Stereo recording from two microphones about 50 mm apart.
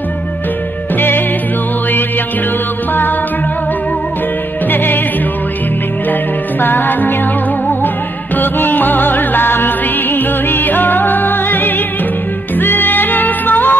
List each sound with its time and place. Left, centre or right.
0.9 s music: left
4.6 s music: left
6.6 s music: left
8.4 s music: left